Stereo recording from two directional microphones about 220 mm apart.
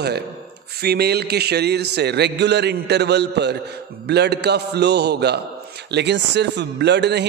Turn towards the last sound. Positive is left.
turn(degrees=-50)  # may be behind; listen again after turning